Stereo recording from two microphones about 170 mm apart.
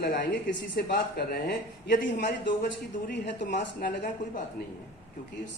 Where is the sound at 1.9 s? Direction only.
90° left.